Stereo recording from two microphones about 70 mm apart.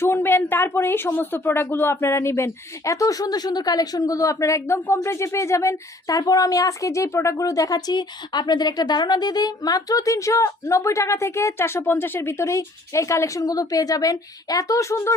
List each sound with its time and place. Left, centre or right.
0.0 s speech: left